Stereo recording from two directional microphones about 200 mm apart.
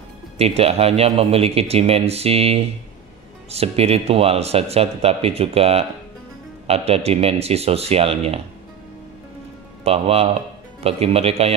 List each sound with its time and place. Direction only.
0.4 s speech: 30° right (ahead or behind)
9.8 s speech: 30° right (ahead or behind)